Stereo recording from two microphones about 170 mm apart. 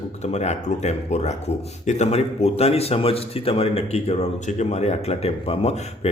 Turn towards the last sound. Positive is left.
turn(degrees=35)  # may be behind; listen again after turning